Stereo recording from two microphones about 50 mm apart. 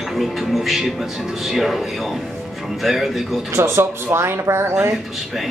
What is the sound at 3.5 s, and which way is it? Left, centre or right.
Speech, right.